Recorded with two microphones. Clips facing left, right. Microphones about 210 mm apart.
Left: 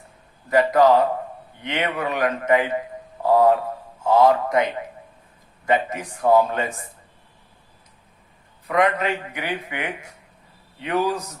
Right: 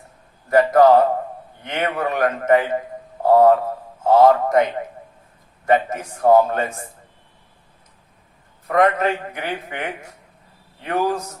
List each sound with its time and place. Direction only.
0.5 s a man's voice: 50° right (ahead or behind)
5.6 s a man's voice: 50° right (ahead or behind)
8.6 s a man's voice: 45° right (ahead or behind)